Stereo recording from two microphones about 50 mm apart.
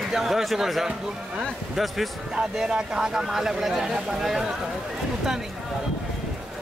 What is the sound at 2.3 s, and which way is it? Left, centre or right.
A man's voice, centre.